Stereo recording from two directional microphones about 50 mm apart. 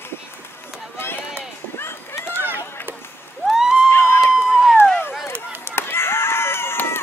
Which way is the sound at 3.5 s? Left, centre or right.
Centre.